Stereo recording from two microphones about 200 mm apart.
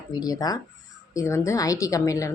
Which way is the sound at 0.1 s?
20° left (ahead or behind).